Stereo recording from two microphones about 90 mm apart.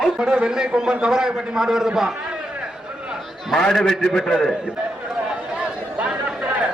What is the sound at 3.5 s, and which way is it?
A man's voice, centre (ahead or behind).